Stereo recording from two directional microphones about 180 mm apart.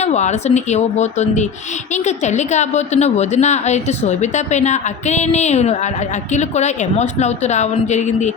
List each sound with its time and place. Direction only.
0.0 s a woman's voice: 40° left (ahead or behind)